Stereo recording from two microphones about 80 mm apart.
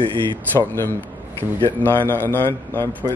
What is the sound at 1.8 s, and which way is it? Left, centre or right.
Speech, left.